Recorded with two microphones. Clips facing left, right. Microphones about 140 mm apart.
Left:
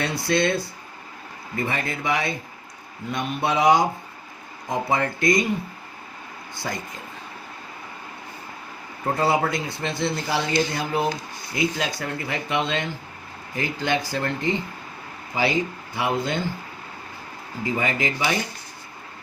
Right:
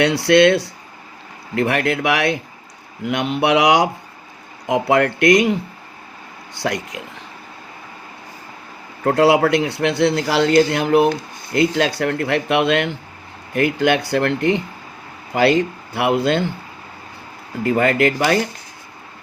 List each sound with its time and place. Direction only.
0.0 s a man's voice: 80° right
6.6 s speech: 85° right
9.0 s a man's voice: 75° right (ahead or behind)
17.6 s a man's voice: 70° right (ahead or behind)